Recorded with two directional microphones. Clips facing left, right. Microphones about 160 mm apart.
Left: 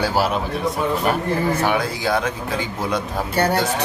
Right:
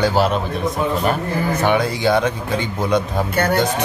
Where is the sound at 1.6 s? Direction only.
Centre (ahead or behind).